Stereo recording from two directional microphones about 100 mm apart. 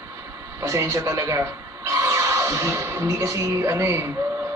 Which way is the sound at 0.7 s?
30° right (ahead or behind).